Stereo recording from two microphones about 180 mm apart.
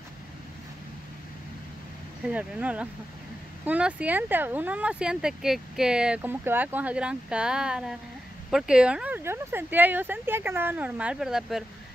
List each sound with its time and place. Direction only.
2.2 s speech: 5° right (ahead or behind)